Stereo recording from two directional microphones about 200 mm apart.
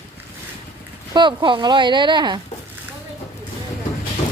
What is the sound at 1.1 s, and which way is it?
Speech, 25° right (ahead or behind).